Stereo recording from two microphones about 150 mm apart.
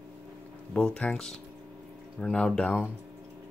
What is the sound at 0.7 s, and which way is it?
Speech, 5° left (ahead or behind).